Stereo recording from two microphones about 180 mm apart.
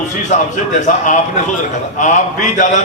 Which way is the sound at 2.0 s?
45° left (ahead or behind).